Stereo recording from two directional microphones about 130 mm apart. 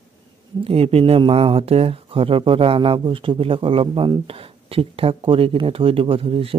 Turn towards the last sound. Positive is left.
turn(degrees=-45)  # may be behind; listen again after turning